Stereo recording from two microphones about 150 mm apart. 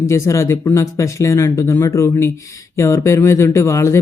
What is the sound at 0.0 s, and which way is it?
Speech, 20° left (ahead or behind).